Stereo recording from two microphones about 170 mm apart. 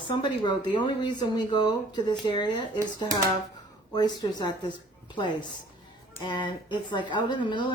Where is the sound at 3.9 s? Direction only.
25° left (ahead or behind).